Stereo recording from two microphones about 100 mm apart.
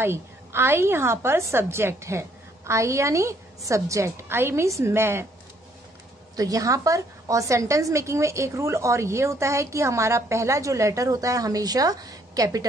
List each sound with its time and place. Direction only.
0.0 s a woman's voice: 25° right (ahead or behind)
6.3 s a woman's voice: 35° right (ahead or behind)